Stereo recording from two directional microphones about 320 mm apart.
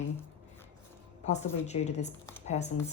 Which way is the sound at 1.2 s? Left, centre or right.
Left.